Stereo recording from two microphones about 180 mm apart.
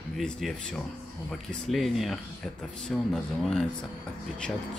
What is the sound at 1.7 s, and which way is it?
Speech, centre (ahead or behind).